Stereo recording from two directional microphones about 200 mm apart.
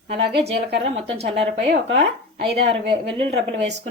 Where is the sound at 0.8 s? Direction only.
30° right (ahead or behind).